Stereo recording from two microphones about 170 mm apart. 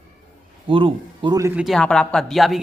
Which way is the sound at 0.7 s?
30° right (ahead or behind).